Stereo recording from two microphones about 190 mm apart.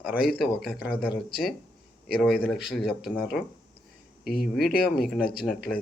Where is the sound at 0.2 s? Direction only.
55° left (ahead or behind).